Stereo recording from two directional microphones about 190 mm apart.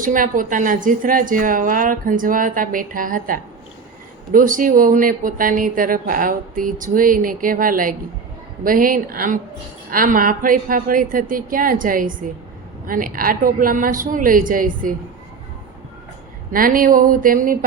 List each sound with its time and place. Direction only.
0.0 s speech: 45° right (ahead or behind)
16.5 s speech: 45° right (ahead or behind)